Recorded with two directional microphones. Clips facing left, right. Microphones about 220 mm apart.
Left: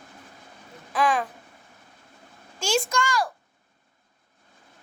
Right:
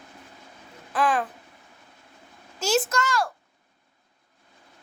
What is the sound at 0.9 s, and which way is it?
Speech, 5° right (ahead or behind).